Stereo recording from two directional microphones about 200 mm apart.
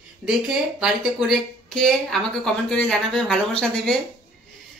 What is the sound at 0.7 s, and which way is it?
Speech, centre (ahead or behind).